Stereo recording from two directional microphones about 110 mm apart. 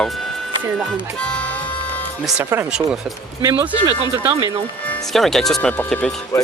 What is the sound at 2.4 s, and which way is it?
Speech, 20° right (ahead or behind).